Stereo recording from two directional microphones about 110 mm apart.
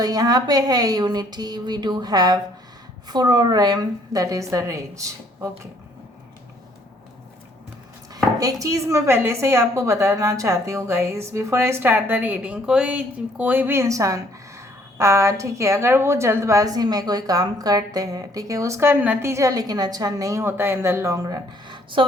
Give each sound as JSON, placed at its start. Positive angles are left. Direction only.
{"t": 0.0, "sound": "a woman's voice", "side_deg": -35}
{"t": 8.1, "sound": "chopping", "side_deg": -30}
{"t": 21.7, "sound": "a sound", "side_deg": -50}